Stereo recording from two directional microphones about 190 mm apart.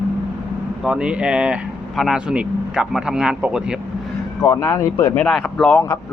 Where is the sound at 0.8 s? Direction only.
5° right (ahead or behind).